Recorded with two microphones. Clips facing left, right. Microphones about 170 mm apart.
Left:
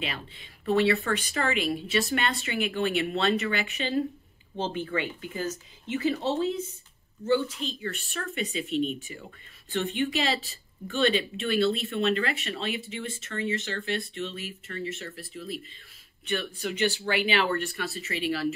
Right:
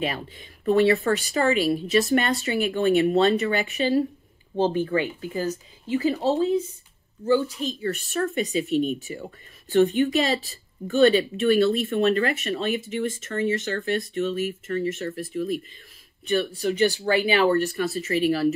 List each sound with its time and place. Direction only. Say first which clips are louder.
0.0 s a woman's voice: right 7 dB; 45° right (ahead or behind)
16.3 s a woman's voice: right 7 dB; 35° right (ahead or behind)